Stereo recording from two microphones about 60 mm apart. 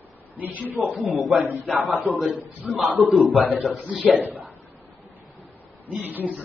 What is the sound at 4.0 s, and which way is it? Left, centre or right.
Speech, right.